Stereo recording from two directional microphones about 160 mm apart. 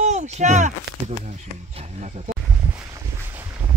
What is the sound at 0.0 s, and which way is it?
Speech, 45° right (ahead or behind).